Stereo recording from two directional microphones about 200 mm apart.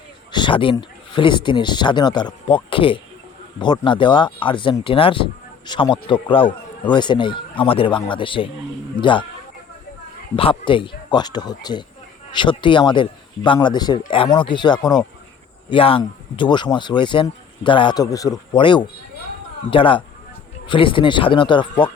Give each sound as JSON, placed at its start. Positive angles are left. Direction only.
{"t": 0.3, "sound": "speech", "side_deg": 25}
{"t": 10.3, "sound": "speech", "side_deg": 25}